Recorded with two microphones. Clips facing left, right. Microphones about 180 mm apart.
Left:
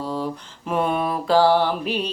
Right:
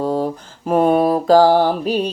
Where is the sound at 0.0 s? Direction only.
45° right (ahead or behind).